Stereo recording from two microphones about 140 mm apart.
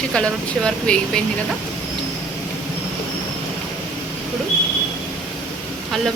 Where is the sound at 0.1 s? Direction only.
5° left (ahead or behind).